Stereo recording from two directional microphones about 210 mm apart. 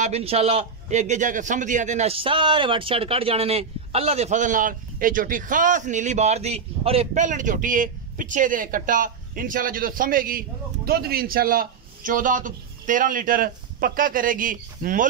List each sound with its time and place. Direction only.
0.0 s a man's voice: 30° right (ahead or behind)